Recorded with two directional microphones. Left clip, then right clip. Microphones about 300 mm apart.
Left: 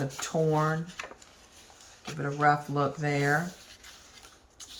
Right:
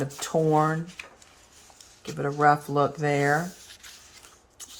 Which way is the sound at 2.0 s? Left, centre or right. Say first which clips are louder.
Right 4 dB; centre.